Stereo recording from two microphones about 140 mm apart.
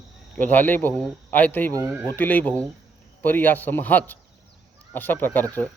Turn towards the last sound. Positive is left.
turn(degrees=15)  # may be behind; listen again after turning